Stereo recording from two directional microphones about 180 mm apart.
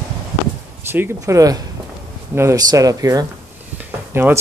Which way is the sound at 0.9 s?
15° right (ahead or behind).